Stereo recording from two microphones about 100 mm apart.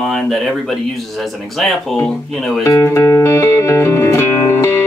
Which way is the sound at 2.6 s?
25° left (ahead or behind).